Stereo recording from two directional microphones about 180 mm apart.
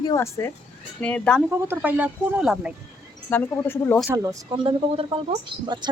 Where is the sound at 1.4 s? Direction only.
10° right (ahead or behind).